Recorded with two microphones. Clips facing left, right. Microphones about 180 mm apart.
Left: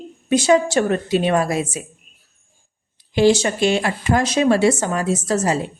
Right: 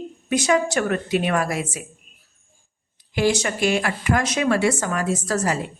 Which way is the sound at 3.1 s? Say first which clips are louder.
Left 6 dB; 30° left (ahead or behind).